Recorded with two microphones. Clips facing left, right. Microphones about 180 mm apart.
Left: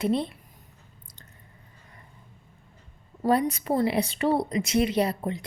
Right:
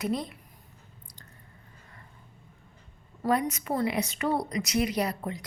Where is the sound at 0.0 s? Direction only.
30° left (ahead or behind).